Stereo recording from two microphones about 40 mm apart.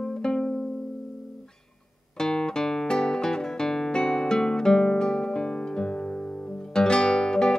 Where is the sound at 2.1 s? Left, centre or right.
Centre.